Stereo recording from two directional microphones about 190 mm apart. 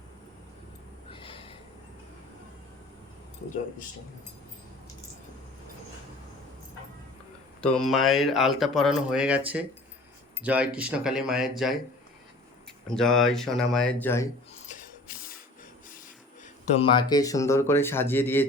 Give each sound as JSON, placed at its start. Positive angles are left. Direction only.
{"t": 1.1, "sound": "snort", "side_deg": 30}
{"t": 7.6, "sound": "speech", "side_deg": 5}
{"t": 12.9, "sound": "speech", "side_deg": 5}
{"t": 16.7, "sound": "speech", "side_deg": 25}